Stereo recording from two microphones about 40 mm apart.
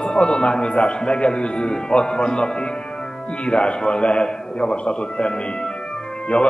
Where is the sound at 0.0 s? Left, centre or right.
Left.